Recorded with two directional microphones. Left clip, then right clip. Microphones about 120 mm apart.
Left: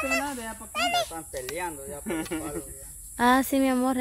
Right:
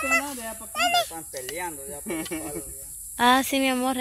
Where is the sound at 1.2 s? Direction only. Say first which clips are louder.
Even; 45° right (ahead or behind).